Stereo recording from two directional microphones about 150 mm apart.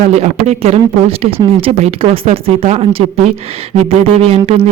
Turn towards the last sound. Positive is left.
turn(degrees=-40)  # may be behind; listen again after turning